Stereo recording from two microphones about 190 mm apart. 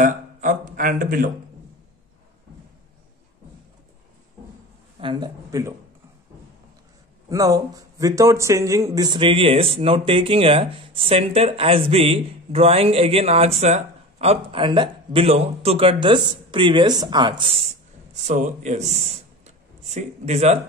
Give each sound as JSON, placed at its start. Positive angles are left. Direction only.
{"t": 0.0, "sound": "a man's voice", "side_deg": -45}
{"t": 5.0, "sound": "a man's voice", "side_deg": -25}
{"t": 7.2, "sound": "a man's voice", "side_deg": -20}